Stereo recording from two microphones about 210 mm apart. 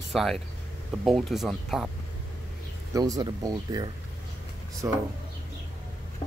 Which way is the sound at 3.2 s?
20° right (ahead or behind).